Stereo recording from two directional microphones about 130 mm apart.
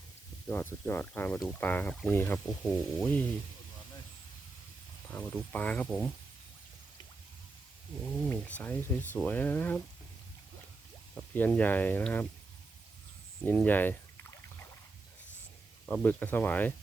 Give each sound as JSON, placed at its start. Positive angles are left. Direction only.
{"t": 0.4, "sound": "speech", "side_deg": 15}
{"t": 2.6, "sound": "sizzle", "side_deg": 0}
{"t": 5.1, "sound": "speech", "side_deg": 10}
{"t": 8.3, "sound": "speech", "side_deg": 10}
{"t": 11.1, "sound": "speech", "side_deg": 10}
{"t": 13.4, "sound": "speech", "side_deg": 15}
{"t": 15.9, "sound": "speech", "side_deg": 15}